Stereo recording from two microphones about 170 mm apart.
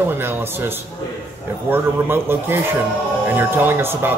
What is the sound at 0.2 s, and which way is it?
A man's voice, 15° right (ahead or behind).